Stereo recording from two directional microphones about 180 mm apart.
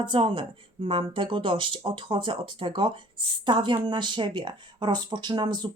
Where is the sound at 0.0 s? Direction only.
25° right (ahead or behind).